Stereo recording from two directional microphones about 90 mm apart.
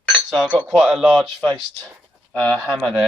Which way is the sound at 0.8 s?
5° right (ahead or behind).